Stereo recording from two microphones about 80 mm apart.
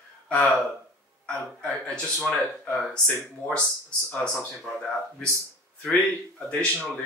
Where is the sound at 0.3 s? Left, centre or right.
Centre.